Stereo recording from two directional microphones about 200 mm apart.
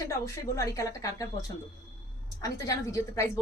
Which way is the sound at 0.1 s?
15° left (ahead or behind).